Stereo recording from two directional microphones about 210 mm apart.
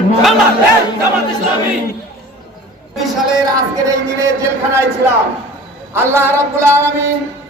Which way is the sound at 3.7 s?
15° right (ahead or behind).